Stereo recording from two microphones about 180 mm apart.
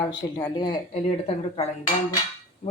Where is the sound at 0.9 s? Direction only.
35° left (ahead or behind).